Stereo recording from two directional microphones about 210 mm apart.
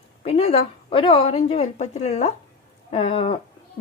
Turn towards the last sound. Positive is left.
turn(degrees=30)  # may be behind; listen again after turning